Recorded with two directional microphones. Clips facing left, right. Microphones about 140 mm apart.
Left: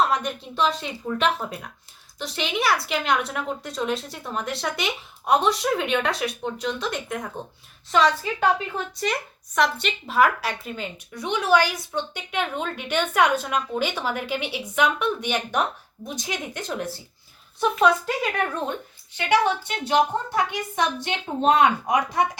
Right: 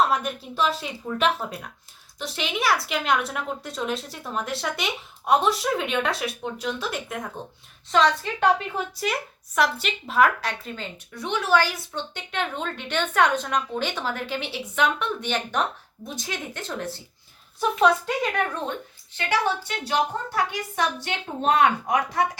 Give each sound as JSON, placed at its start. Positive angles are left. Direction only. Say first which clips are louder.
{"t": 0.0, "sound": "a woman's voice", "louder": "even", "side_deg": -5}
{"t": 17.6, "sound": "a woman's voice", "louder": "even", "side_deg": 0}
{"t": 19.1, "sound": "a woman's voice", "louder": "left 4 dB", "side_deg": 20}